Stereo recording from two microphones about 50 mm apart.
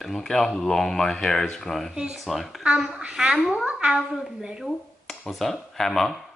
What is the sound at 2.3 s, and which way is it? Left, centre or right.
Speech, centre.